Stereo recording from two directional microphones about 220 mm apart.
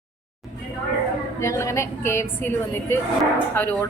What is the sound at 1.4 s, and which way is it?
A woman's voice, 15° left (ahead or behind).